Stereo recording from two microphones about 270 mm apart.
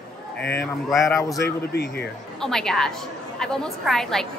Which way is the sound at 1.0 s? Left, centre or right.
Centre.